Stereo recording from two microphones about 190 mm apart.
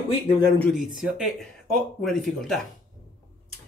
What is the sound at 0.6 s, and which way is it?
Speech, centre (ahead or behind).